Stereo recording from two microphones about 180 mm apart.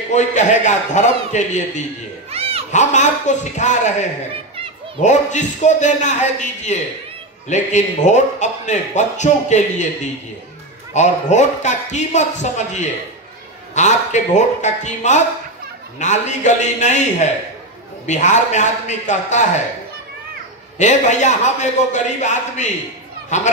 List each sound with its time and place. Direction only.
0.1 s speech: 40° left (ahead or behind)
2.3 s a sound: 35° right (ahead or behind)
2.7 s speech: 40° left (ahead or behind)
20.7 s speech: 40° left (ahead or behind)